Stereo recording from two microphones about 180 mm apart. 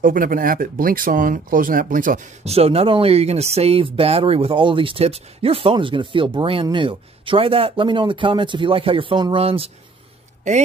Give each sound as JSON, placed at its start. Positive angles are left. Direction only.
{"t": 0.0, "sound": "speech", "side_deg": -50}
{"t": 10.4, "sound": "a woman's voice", "side_deg": -40}